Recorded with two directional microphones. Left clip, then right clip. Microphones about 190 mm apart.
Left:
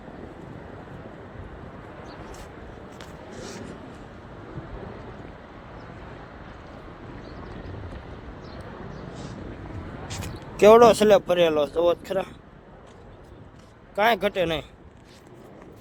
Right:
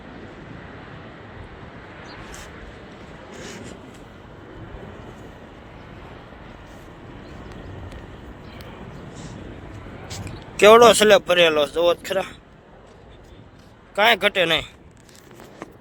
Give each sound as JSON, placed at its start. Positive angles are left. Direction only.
{"t": 10.6, "sound": "speech", "side_deg": 0}
{"t": 13.9, "sound": "speech", "side_deg": 0}